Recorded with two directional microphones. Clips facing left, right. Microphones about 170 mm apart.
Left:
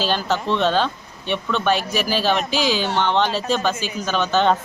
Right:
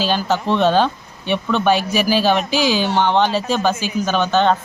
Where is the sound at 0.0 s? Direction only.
5° right (ahead or behind).